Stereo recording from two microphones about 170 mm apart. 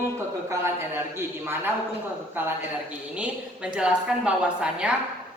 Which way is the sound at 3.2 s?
5° right (ahead or behind).